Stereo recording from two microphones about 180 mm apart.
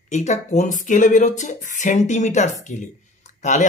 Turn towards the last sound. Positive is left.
turn(degrees=40)  # may be behind; listen again after turning